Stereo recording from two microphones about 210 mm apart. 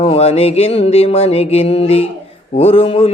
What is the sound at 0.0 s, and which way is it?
Music, 30° left (ahead or behind).